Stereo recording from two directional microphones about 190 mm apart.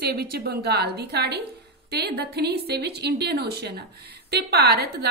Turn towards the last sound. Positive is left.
turn(degrees=-55)  # may be behind; listen again after turning